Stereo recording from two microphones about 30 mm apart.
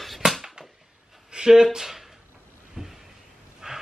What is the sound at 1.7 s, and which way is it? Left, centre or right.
Speech, centre.